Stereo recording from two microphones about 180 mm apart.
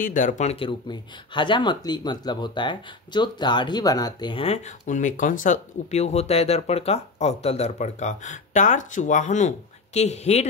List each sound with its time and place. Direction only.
0.0 s speech: 45° left (ahead or behind)